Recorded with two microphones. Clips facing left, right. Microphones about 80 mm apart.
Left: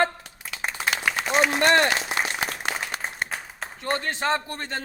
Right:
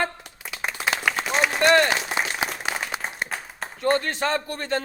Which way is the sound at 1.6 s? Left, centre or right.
Left.